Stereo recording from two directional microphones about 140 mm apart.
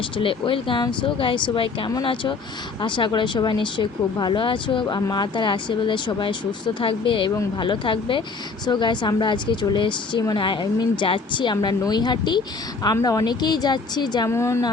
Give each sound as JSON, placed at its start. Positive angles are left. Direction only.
{"t": 0.2, "sound": "speech", "side_deg": 40}
{"t": 14.3, "sound": "speech", "side_deg": 20}